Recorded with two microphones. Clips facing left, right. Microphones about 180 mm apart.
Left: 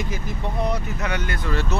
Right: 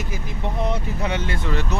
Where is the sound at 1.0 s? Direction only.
25° right (ahead or behind).